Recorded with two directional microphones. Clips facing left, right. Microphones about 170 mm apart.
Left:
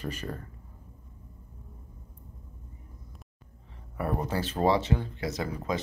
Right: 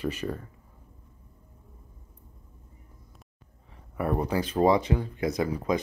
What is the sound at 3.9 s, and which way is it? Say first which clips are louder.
Speech: right 3 dB; 15° right (ahead or behind).